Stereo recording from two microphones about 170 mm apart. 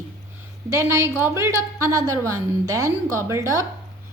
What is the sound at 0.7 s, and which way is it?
A woman's voice, 15° right (ahead or behind).